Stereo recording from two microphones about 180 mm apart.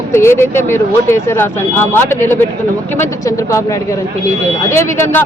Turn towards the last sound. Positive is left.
turn(degrees=15)  # may be behind; listen again after turning